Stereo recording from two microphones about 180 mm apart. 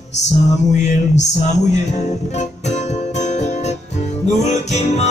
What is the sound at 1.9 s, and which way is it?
Music, 40° left (ahead or behind).